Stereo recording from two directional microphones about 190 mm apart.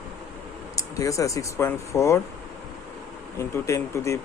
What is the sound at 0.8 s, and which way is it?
Speech, 15° left (ahead or behind).